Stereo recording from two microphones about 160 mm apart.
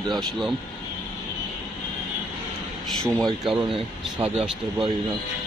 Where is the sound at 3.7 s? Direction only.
35° right (ahead or behind).